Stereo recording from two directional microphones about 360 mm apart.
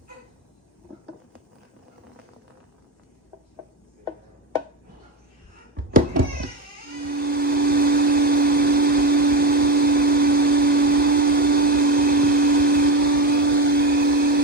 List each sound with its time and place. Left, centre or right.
5.7 s cat: right
7.0 s vacuum cleaner: right